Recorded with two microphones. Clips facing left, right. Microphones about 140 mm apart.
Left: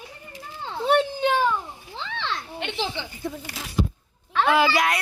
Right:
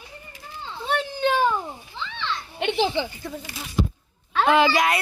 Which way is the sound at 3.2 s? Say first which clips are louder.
Left 2 dB; 20° left (ahead or behind).